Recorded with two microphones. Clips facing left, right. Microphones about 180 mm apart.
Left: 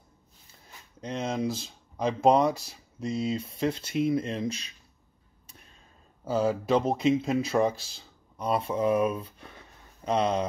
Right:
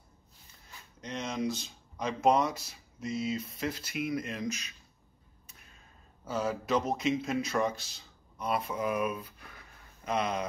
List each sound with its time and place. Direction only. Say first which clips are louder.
1.0 s speech: left 4 dB; 30° left (ahead or behind)
6.2 s speech: left 6 dB; 30° left (ahead or behind)